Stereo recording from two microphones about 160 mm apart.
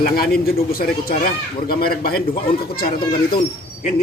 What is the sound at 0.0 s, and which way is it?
Speech, 70° left (ahead or behind).